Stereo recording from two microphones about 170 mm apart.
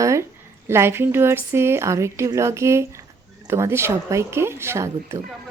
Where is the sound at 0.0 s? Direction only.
15° right (ahead or behind).